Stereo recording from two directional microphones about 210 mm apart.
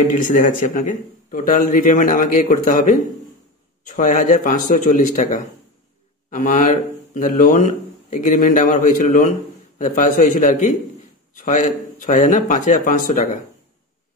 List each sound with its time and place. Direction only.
0.1 s speech: 40° left (ahead or behind)